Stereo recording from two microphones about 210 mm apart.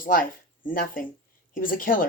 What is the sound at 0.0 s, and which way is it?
Speech, 40° left (ahead or behind).